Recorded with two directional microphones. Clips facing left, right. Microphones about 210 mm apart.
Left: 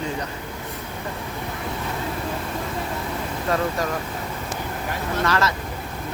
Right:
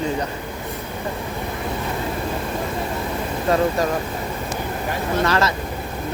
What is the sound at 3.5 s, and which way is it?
Speech, 30° right (ahead or behind).